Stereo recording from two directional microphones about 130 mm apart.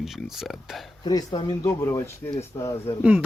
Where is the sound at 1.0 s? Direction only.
30° left (ahead or behind).